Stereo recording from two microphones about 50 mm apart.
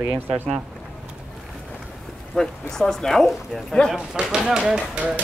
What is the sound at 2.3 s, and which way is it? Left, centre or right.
Speech, centre.